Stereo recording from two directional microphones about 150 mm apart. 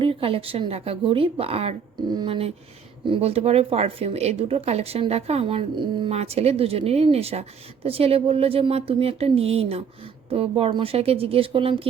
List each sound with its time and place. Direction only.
0.0 s speech: 35° right (ahead or behind)
6.1 s speech: 45° right (ahead or behind)